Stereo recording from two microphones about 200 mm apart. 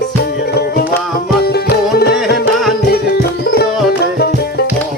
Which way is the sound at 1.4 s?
55° left (ahead or behind).